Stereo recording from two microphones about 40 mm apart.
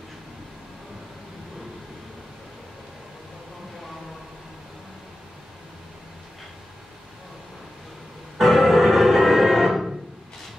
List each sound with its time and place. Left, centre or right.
8.4 s music: centre